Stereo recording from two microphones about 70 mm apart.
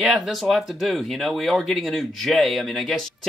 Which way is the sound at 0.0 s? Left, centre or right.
Centre.